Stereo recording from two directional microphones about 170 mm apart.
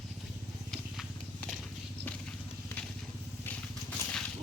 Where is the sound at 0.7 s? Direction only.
Centre (ahead or behind).